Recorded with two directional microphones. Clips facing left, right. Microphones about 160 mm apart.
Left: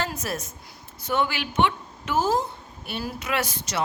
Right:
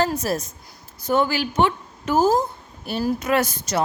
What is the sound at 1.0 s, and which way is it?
A woman's voice, 40° right (ahead or behind).